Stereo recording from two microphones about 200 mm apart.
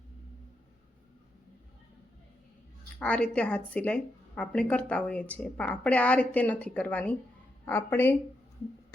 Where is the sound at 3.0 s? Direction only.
5° left (ahead or behind).